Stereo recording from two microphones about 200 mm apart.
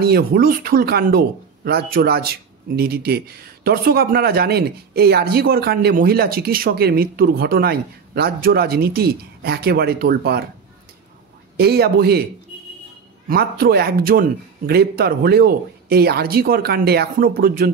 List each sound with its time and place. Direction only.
0.0 s speech: 50° right (ahead or behind)
11.5 s speech: 50° right (ahead or behind)
13.3 s speech: 50° right (ahead or behind)